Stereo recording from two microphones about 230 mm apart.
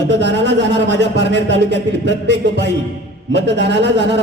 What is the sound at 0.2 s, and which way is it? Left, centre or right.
A man's voice, right.